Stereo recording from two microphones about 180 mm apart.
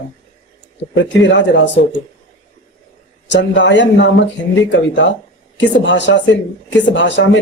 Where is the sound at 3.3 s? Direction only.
80° left.